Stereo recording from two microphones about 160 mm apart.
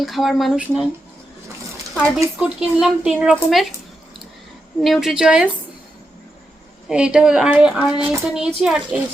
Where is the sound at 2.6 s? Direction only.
5° right (ahead or behind).